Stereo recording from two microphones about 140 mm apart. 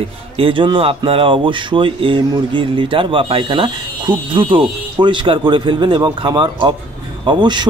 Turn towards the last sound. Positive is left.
turn(degrees=-30)  # may be behind; listen again after turning